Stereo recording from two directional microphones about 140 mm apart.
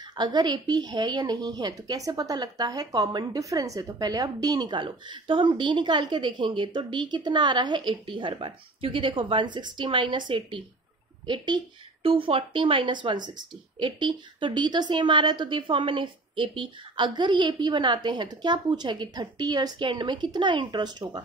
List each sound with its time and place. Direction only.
0.1 s a woman's voice: 30° right (ahead or behind)